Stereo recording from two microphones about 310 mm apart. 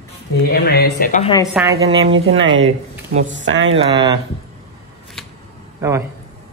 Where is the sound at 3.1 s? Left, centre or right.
Right.